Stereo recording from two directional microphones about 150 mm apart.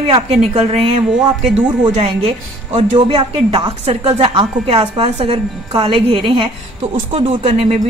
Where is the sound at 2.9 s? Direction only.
35° right (ahead or behind).